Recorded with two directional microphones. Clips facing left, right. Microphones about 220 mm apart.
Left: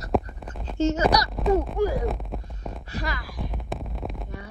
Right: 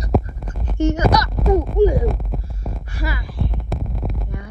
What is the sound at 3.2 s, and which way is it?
Heart sounds, 15° left (ahead or behind).